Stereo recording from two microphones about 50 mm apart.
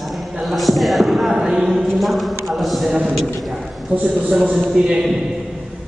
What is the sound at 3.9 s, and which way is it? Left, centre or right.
Speech, right.